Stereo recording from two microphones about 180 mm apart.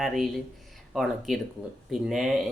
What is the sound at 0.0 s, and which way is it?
Speech, centre (ahead or behind).